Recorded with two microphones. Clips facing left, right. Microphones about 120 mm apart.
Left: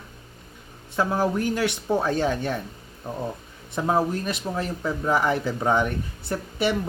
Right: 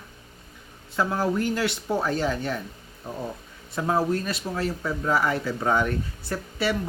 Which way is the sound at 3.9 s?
15° left (ahead or behind).